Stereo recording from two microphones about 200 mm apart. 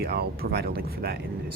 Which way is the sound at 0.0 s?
55° right (ahead or behind).